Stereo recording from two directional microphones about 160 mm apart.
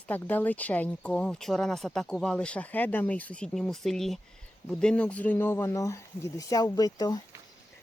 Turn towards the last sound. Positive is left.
turn(degrees=25)  # may be behind; listen again after turning